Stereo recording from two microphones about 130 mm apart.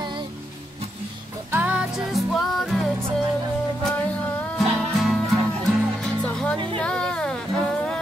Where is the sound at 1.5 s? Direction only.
10° right (ahead or behind).